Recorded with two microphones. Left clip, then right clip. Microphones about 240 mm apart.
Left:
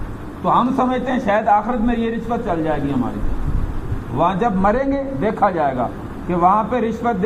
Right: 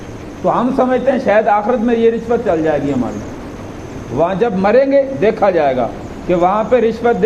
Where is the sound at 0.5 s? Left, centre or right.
Left.